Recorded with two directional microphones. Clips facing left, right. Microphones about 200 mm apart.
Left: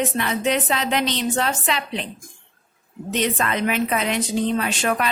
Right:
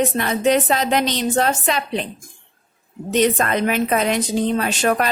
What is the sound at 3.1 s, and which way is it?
A woman's voice, 45° right (ahead or behind).